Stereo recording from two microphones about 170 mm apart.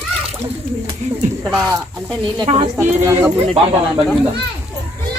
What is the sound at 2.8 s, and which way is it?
Speech, 15° right (ahead or behind).